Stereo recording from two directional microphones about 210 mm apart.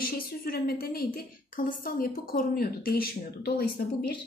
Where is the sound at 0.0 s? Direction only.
45° left (ahead or behind).